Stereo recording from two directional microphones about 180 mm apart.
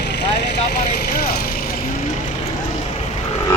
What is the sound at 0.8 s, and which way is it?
Vehicle, 60° left (ahead or behind).